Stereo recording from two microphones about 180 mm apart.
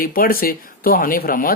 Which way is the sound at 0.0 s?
55° left (ahead or behind).